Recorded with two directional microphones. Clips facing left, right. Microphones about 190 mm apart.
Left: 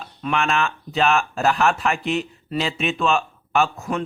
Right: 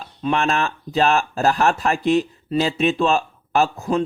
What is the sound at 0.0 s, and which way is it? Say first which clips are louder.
Speech: right 3 dB; 35° right (ahead or behind).